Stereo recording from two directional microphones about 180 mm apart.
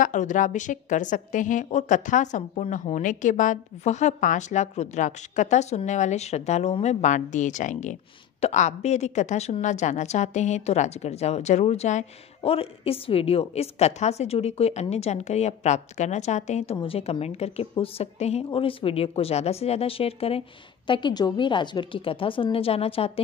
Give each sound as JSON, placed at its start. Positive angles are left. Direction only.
{"t": 0.0, "sound": "a woman's voice", "side_deg": 45}